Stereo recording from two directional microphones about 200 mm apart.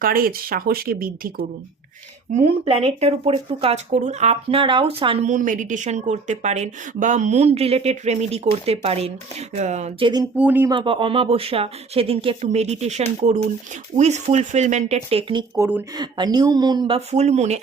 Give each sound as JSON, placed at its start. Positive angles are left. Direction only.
{"t": 0.0, "sound": "speech", "side_deg": -45}
{"t": 2.3, "sound": "speech", "side_deg": -35}
{"t": 10.3, "sound": "speech", "side_deg": -10}
{"t": 10.7, "sound": "speech", "side_deg": -25}